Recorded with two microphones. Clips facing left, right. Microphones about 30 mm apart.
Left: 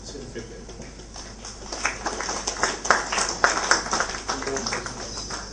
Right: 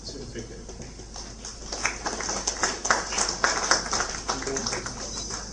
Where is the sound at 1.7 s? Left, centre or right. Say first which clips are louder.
Left 2 dB; left.